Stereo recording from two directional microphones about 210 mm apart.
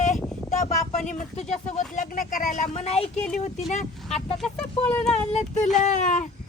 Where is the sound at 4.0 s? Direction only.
Centre (ahead or behind).